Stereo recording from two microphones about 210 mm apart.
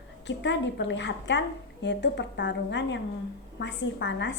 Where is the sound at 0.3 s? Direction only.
60° left (ahead or behind).